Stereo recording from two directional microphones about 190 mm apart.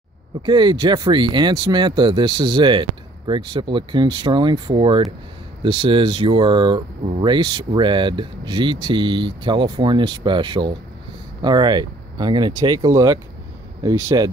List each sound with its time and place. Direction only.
0.5 s speech: 25° right (ahead or behind)